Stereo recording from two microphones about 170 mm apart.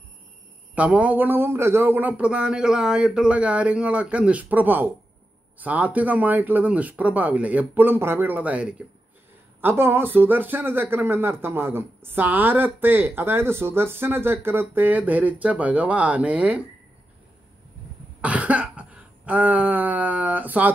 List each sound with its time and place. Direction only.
0.7 s speech: 10° right (ahead or behind)
18.2 s cough: 10° right (ahead or behind)